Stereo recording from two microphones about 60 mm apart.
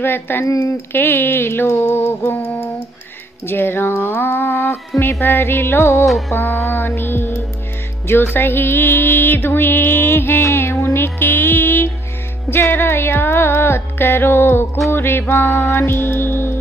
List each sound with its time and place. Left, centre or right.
0.0 s music: left
6.0 s music: centre
6.3 s music: left